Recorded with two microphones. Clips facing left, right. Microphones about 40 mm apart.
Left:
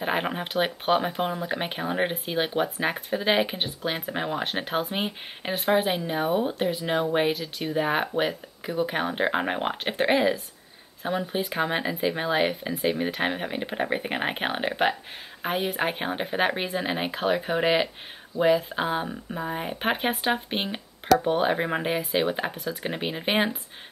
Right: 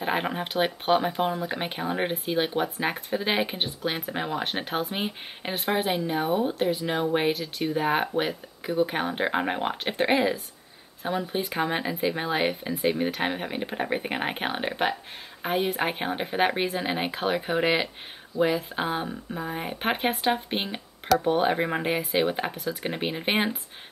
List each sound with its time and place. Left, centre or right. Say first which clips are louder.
0.0 s speech: even; centre